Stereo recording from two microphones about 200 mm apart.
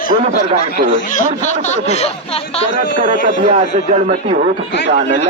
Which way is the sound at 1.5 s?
35° left (ahead or behind).